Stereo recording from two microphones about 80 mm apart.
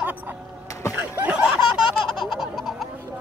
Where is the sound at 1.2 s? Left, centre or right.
Right.